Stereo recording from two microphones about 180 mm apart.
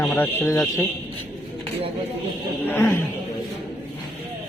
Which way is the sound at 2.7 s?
10° left (ahead or behind).